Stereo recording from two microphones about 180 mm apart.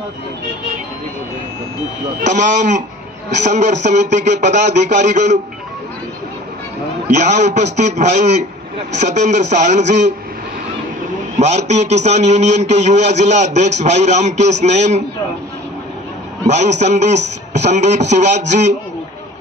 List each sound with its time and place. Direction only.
2.2 s a man's voice: 45° right (ahead or behind)
7.1 s a man's voice: 40° right (ahead or behind)
11.3 s a man's voice: 40° right (ahead or behind)
16.4 s a man's voice: 40° right (ahead or behind)